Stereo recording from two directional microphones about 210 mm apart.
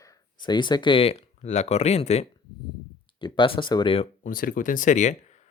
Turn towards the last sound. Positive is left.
turn(degrees=35)  # may be behind; listen again after turning